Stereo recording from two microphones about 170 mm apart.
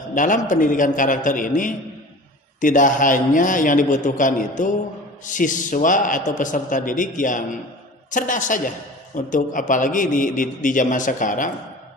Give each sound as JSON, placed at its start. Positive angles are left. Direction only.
{"t": 0.1, "sound": "a man's voice", "side_deg": 50}